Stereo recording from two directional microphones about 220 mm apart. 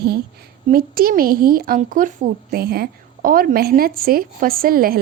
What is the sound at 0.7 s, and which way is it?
A woman's voice, 40° right (ahead or behind).